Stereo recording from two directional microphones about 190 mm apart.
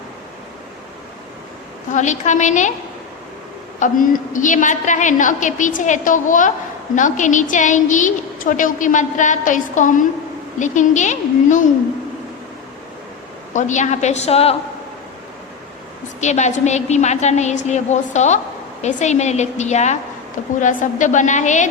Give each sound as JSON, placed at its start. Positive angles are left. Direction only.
{"t": 1.9, "sound": "a woman's voice", "side_deg": 40}
{"t": 3.8, "sound": "a woman's voice", "side_deg": 45}
{"t": 13.5, "sound": "a woman's voice", "side_deg": 40}
{"t": 16.2, "sound": "a woman's voice", "side_deg": 40}